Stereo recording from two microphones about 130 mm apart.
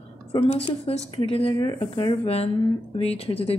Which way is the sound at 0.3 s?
45° left (ahead or behind).